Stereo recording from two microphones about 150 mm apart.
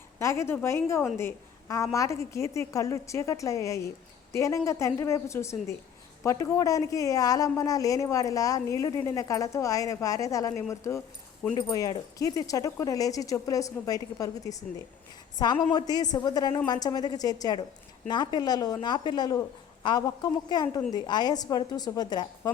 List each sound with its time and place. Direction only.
0.2 s speech: 20° left (ahead or behind)